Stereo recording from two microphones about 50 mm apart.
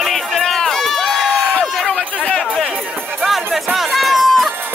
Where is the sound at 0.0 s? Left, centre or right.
Centre.